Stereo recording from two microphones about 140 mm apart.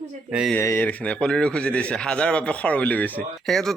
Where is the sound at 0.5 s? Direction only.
15° left (ahead or behind).